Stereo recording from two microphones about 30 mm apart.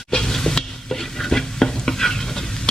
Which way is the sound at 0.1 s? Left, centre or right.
Centre.